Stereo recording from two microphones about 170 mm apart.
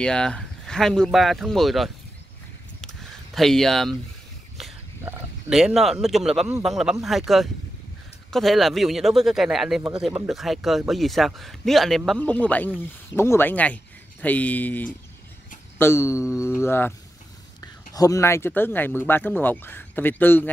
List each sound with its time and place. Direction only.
0.0 s speech: 5° left (ahead or behind)
2.8 s a sound: 5° left (ahead or behind)
5.5 s speech: 5° right (ahead or behind)